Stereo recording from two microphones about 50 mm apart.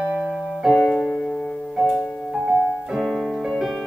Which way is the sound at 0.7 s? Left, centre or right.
Centre.